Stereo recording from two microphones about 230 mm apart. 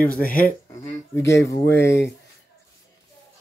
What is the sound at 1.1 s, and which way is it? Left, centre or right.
Speech, centre.